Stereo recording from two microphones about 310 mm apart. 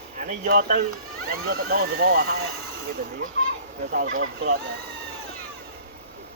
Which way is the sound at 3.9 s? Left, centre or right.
Right.